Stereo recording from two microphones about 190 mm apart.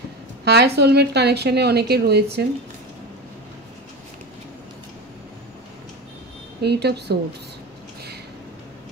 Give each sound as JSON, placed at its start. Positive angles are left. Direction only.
{"t": 0.5, "sound": "speech", "side_deg": -60}
{"t": 6.6, "sound": "speech", "side_deg": -60}